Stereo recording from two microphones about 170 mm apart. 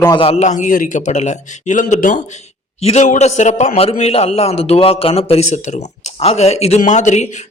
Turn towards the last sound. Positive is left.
turn(degrees=45)  # may be behind; listen again after turning